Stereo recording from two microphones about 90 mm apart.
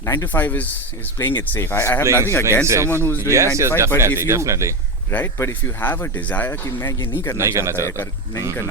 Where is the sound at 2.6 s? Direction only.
30° right (ahead or behind).